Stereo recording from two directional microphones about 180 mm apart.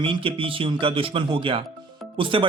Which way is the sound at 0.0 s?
30° right (ahead or behind).